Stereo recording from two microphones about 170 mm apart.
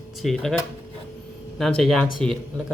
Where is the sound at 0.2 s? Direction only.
Centre (ahead or behind).